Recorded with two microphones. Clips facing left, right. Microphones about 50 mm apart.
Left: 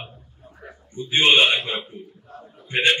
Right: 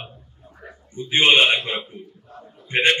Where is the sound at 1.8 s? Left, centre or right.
Centre.